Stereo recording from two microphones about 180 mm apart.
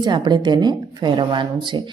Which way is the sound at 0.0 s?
25° right (ahead or behind).